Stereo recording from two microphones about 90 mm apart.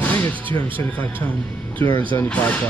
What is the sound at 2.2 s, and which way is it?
Speech, 15° left (ahead or behind).